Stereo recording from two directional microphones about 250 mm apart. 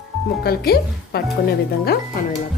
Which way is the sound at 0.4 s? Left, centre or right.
Left.